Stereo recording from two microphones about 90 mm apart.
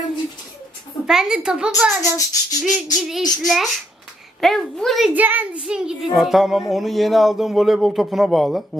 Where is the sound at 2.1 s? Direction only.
40° left (ahead or behind).